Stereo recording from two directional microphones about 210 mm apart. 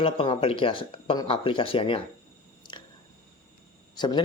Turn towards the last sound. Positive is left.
turn(degrees=20)  # may be behind; listen again after turning